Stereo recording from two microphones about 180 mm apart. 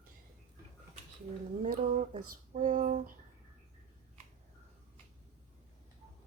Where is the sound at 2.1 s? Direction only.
45° right (ahead or behind).